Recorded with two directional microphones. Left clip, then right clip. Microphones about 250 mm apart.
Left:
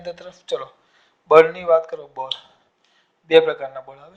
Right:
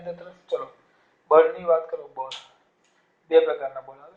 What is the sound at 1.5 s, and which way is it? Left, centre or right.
Speech, left.